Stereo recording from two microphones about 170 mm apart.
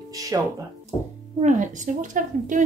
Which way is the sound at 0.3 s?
20° right (ahead or behind).